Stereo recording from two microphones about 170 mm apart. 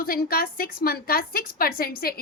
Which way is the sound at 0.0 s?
60° left (ahead or behind).